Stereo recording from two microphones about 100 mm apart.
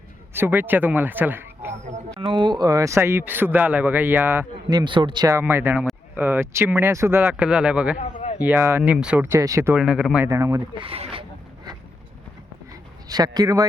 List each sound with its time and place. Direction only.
0.3 s speech: 20° right (ahead or behind)
2.2 s a man's voice: 50° right (ahead or behind); by 4.4 s 20° right (ahead or behind)
4.7 s speech: 50° right (ahead or behind)
5.4 s a man's voice: 25° right (ahead or behind)
8.8 s speech: 10° right (ahead or behind)
9.2 s a man's voice: 30° right (ahead or behind)
9.7 s speech: 5° right (ahead or behind)
10.2 s a man's voice: 30° right (ahead or behind)
10.8 s speech: 70° right (ahead or behind)
13.1 s speech: 40° right (ahead or behind)